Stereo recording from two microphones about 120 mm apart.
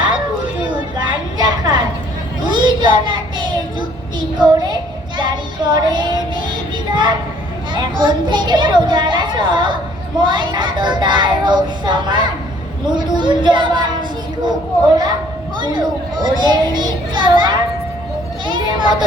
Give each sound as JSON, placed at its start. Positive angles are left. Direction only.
{"t": 0.6, "sound": "a sound", "side_deg": -40}
{"t": 2.4, "sound": "child singing", "side_deg": -40}
{"t": 6.9, "sound": "a woman's voice", "side_deg": -40}
{"t": 15.5, "sound": "a child's voice", "side_deg": -40}